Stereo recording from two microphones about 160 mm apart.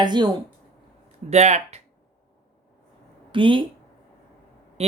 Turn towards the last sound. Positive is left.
turn(degrees=-30)  # may be behind; listen again after turning